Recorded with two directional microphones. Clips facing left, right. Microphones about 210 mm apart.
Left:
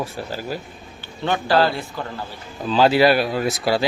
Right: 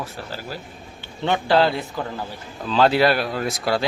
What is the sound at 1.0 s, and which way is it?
Speech, 20° right (ahead or behind).